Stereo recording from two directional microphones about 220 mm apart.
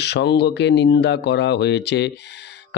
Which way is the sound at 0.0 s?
50° left (ahead or behind).